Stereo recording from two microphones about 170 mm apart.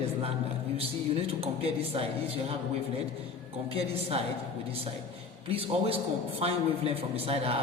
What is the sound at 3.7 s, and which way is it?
Speech, 35° right (ahead or behind).